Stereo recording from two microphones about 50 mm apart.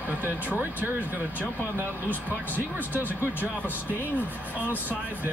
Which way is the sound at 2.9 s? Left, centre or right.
Right.